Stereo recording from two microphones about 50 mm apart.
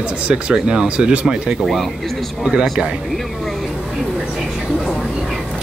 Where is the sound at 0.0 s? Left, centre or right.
Right.